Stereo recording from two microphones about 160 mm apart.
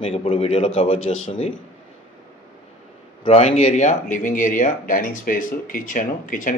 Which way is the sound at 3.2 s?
40° left (ahead or behind).